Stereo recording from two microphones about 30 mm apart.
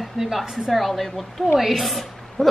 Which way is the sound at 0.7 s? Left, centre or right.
Centre.